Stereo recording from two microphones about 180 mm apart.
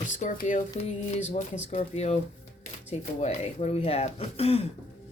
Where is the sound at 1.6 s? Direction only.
40° left (ahead or behind).